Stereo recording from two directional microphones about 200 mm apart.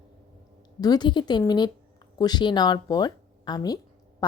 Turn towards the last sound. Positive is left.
turn(degrees=20)  # may be behind; listen again after turning